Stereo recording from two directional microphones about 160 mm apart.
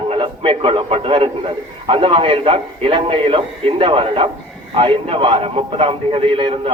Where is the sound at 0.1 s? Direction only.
35° right (ahead or behind).